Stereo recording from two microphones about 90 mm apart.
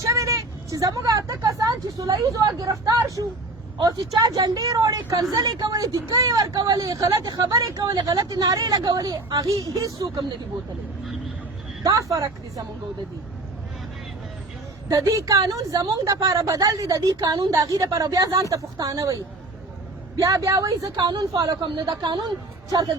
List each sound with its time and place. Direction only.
0.0 s speech: 35° right (ahead or behind)
9.6 s a woman's voice: 35° right (ahead or behind)
11.9 s a woman's voice: 35° right (ahead or behind)
14.8 s a woman's voice: 35° right (ahead or behind); by 22.3 s 55° right (ahead or behind)